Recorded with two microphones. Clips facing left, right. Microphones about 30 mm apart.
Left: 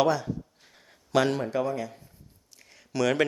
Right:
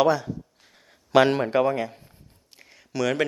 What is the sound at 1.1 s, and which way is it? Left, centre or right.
Speech, right.